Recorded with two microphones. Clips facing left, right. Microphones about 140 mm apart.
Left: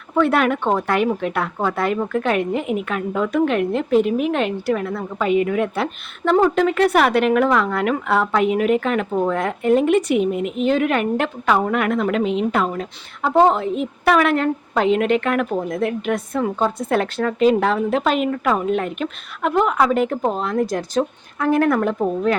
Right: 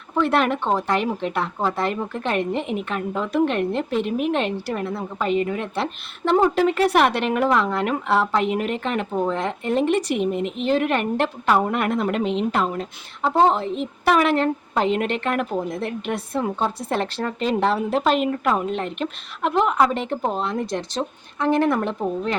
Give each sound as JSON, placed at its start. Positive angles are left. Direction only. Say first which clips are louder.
{"t": 0.2, "sound": "a woman's voice", "louder": "left 3 dB", "side_deg": 0}